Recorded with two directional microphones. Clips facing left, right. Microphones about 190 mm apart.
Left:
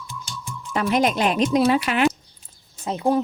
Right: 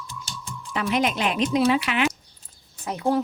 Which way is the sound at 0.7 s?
40° left (ahead or behind).